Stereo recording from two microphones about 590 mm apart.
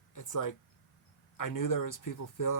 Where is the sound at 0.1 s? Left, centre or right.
Left.